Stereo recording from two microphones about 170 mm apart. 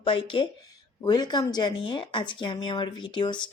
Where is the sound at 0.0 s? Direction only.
30° left (ahead or behind).